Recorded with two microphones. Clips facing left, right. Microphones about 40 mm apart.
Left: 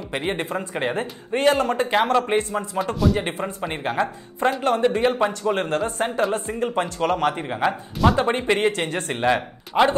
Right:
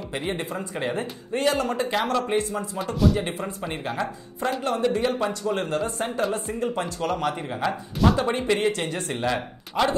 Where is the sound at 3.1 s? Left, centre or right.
Left.